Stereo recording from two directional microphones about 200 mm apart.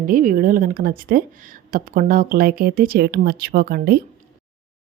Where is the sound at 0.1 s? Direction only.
45° right (ahead or behind).